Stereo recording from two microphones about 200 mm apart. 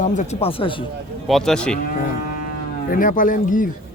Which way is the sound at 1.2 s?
Centre (ahead or behind).